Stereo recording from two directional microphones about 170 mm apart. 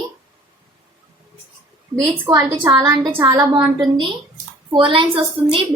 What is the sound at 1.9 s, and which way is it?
A woman's voice, 20° right (ahead or behind).